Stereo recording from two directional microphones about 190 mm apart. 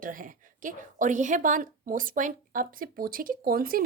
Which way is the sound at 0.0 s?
45° right (ahead or behind).